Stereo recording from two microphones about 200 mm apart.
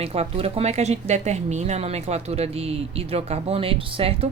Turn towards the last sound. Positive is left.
turn(degrees=-30)  # may be behind; listen again after turning